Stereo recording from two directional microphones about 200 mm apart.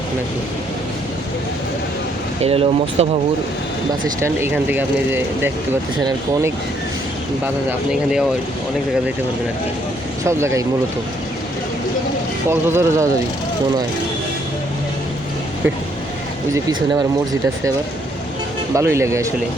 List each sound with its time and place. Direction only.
2.4 s speech: 30° right (ahead or behind)
4.2 s speech: 10° right (ahead or behind)
7.4 s speech: 10° right (ahead or behind)
10.2 s speech: 15° right (ahead or behind)
12.5 s speech: 10° right (ahead or behind)
18.7 s speech: 15° right (ahead or behind)